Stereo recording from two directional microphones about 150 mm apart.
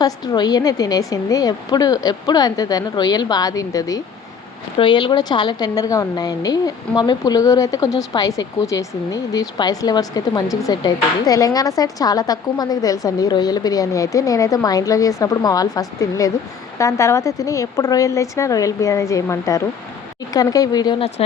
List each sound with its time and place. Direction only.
0.0 s speech: 25° left (ahead or behind)